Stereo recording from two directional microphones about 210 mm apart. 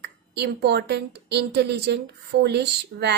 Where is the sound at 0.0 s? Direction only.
50° right (ahead or behind).